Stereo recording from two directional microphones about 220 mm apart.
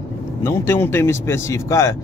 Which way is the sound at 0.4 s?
10° left (ahead or behind).